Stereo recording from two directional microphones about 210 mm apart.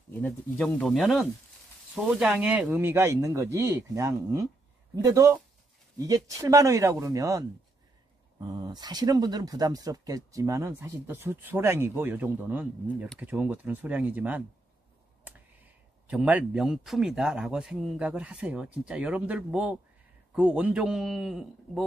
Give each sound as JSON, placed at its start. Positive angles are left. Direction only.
{"t": 0.1, "sound": "speech", "side_deg": 5}